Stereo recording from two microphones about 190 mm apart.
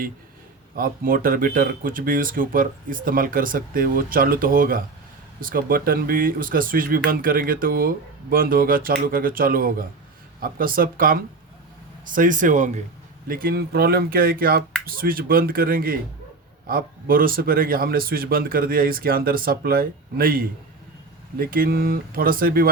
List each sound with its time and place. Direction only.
0.8 s speech: 50° right (ahead or behind)